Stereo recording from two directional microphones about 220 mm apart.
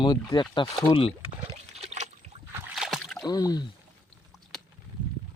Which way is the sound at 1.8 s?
30° right (ahead or behind).